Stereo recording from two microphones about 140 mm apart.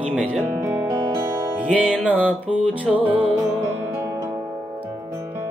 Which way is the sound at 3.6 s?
25° right (ahead or behind).